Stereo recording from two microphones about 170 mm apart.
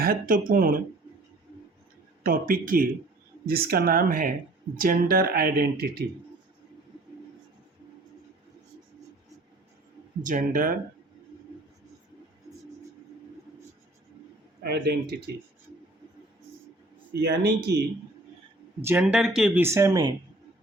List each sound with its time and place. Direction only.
0.0 s speech: 55° right (ahead or behind)
2.2 s speech: 55° right (ahead or behind)
10.2 s speech: 55° right (ahead or behind)
14.6 s speech: 75° right (ahead or behind)
17.1 s speech: 75° right (ahead or behind)
18.8 s speech: 10° right (ahead or behind)